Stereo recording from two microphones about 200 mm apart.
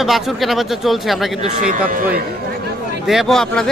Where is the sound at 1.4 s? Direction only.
45° right (ahead or behind).